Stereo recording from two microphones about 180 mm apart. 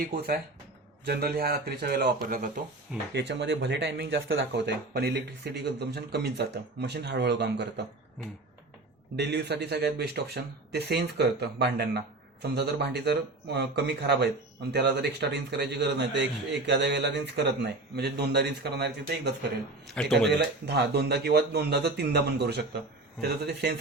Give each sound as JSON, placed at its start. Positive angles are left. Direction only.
{"t": 0.1, "sound": "speech", "side_deg": -60}
{"t": 3.1, "sound": "speech", "side_deg": -75}
{"t": 9.1, "sound": "speech", "side_deg": -70}
{"t": 19.9, "sound": "a man's voice", "side_deg": 5}
{"t": 20.3, "sound": "speech", "side_deg": -65}